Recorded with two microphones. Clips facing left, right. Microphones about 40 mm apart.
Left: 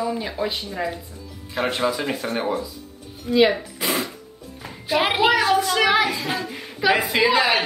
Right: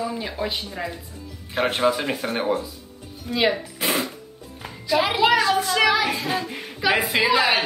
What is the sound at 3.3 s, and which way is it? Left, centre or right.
Speech, centre.